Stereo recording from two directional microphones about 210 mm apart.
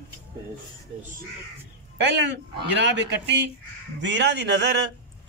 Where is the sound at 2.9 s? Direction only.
55° right (ahead or behind).